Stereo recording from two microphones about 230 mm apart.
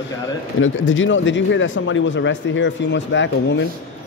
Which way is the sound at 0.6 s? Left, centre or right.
Left.